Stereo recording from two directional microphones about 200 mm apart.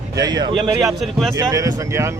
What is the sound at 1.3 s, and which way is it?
Speech, 15° right (ahead or behind).